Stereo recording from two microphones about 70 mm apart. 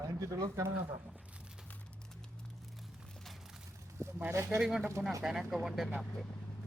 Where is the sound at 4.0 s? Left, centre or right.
Right.